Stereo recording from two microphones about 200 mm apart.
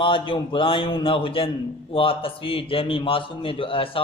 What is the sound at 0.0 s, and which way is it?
A man's voice, 25° left (ahead or behind).